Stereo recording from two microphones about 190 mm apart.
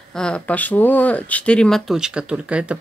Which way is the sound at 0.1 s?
5° left (ahead or behind).